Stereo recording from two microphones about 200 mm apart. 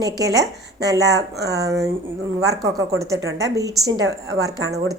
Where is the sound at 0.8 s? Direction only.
15° right (ahead or behind).